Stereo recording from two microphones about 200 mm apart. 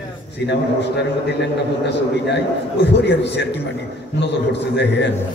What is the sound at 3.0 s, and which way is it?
Speech, 60° left (ahead or behind).